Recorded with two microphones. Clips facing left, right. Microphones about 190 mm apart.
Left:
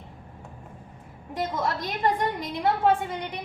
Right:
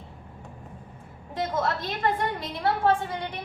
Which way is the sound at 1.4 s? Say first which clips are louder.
Right 1 dB; 10° left (ahead or behind).